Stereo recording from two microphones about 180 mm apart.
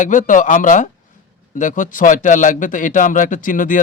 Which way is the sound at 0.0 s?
45° left (ahead or behind).